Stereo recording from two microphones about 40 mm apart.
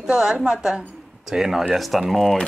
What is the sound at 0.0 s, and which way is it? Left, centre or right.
Speech, centre.